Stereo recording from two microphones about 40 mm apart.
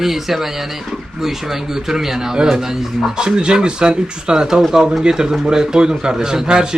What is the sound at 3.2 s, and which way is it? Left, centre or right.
A man's voice, centre.